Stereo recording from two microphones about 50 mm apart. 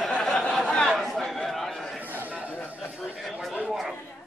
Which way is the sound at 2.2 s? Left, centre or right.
Right.